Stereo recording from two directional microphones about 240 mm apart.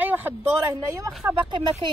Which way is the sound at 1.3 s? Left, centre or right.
Centre.